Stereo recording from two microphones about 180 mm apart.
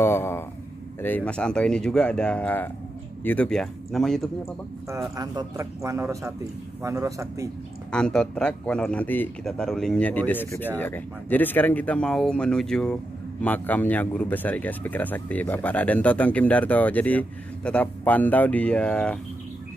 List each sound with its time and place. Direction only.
0.0 s a sound: 15° left (ahead or behind)
1.0 s speech: 10° left (ahead or behind)
5.1 s a man's voice: 20° right (ahead or behind)
7.9 s speech: 5° left (ahead or behind)